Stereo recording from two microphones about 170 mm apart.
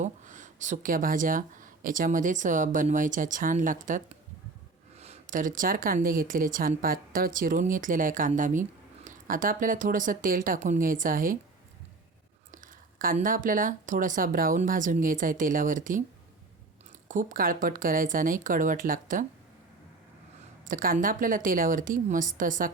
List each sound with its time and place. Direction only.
0.0 s speech: 45° right (ahead or behind)
4.9 s speech: 40° right (ahead or behind)
12.5 s speech: 55° right (ahead or behind)
17.1 s speech: 50° right (ahead or behind)
20.7 s speech: 55° right (ahead or behind)